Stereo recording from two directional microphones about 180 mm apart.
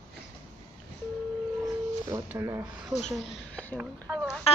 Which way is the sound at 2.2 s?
15° right (ahead or behind).